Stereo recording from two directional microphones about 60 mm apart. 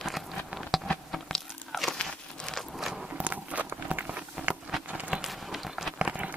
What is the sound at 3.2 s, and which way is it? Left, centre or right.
Walk, right.